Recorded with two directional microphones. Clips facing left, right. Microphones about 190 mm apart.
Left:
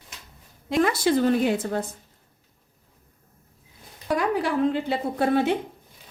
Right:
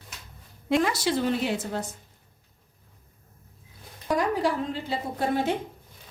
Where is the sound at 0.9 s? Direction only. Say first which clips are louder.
Left 5 dB; 55° left (ahead or behind).